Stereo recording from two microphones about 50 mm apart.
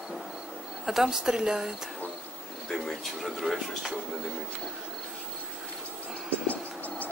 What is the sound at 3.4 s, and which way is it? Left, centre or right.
Speech, centre.